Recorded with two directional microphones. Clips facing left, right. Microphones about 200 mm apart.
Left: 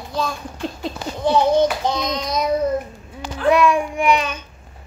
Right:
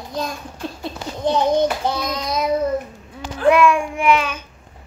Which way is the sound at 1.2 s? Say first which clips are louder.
Left 1 dB; 15° right (ahead or behind).